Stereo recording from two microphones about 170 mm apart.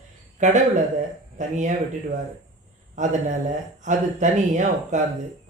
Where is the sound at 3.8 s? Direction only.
45° right (ahead or behind).